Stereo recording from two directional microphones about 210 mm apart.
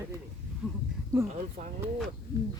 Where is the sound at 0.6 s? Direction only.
5° right (ahead or behind).